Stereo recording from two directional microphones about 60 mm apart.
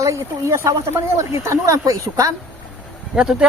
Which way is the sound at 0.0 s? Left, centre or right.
Right.